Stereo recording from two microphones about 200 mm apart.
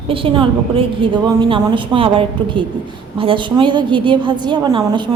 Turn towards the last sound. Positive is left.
turn(degrees=-20)  # may be behind; listen again after turning